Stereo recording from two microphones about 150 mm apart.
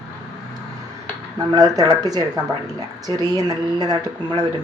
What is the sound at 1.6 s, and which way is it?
Speech, 25° right (ahead or behind).